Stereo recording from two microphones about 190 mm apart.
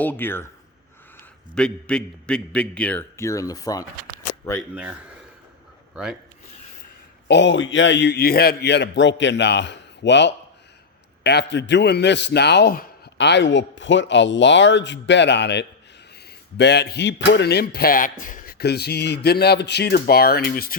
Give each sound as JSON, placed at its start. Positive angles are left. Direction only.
{"t": 0.0, "sound": "a man's voice", "side_deg": 10}
{"t": 1.5, "sound": "a man's voice", "side_deg": 5}
{"t": 4.7, "sound": "a man's voice", "side_deg": -5}
{"t": 7.3, "sound": "a man's voice", "side_deg": 70}